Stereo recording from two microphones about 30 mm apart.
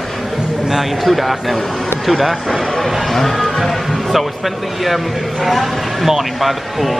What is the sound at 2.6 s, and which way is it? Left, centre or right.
Speech, centre.